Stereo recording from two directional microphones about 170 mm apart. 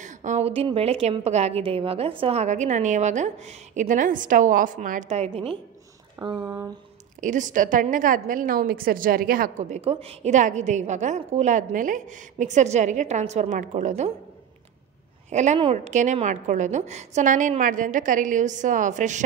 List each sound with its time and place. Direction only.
0.0 s a woman's voice: 45° right (ahead or behind)
6.2 s speech: 20° right (ahead or behind)
7.2 s a woman's voice: 50° right (ahead or behind)
15.2 s a woman's voice: 45° right (ahead or behind)